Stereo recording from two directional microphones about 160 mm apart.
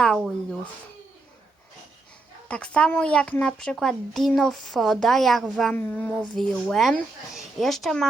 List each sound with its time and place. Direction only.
0.0 s speech: centre (ahead or behind)
2.5 s speech: 5° left (ahead or behind)